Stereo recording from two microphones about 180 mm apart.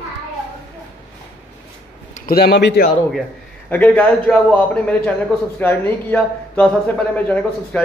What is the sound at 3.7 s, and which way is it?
A man's voice, 10° left (ahead or behind).